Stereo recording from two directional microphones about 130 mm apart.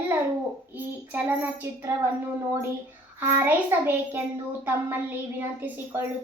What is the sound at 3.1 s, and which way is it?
A child's voice, 15° right (ahead or behind).